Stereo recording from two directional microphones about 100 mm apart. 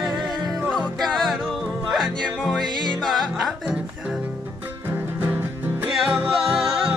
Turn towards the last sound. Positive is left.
turn(degrees=-5)  # may be behind; listen again after turning